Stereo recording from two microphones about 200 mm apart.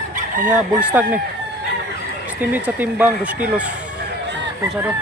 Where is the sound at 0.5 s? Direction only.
10° right (ahead or behind).